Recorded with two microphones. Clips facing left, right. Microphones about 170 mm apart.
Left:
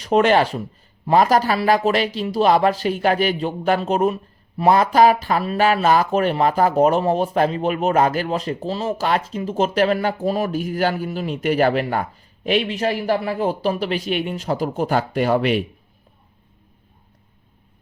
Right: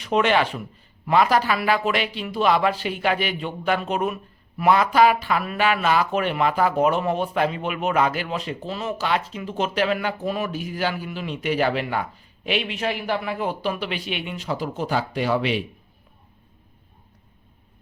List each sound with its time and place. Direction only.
0.0 s speech: 40° left (ahead or behind)